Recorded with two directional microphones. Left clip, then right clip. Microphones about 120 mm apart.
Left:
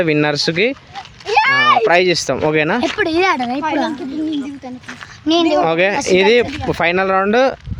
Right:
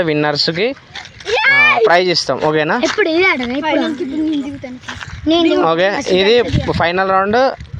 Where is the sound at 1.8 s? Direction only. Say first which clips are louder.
Right 1 dB; 30° left (ahead or behind).